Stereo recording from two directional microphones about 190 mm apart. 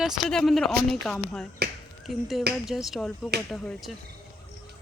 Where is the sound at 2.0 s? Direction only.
Centre (ahead or behind).